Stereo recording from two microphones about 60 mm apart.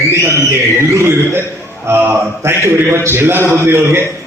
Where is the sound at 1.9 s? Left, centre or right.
Right.